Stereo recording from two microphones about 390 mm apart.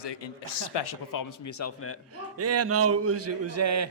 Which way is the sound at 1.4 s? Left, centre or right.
Left.